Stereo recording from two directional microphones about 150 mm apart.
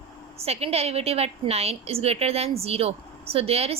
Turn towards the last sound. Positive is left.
turn(degrees=-40)  # may be behind; listen again after turning